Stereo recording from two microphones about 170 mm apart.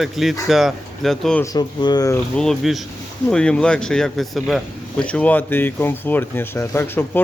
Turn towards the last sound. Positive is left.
turn(degrees=15)  # may be behind; listen again after turning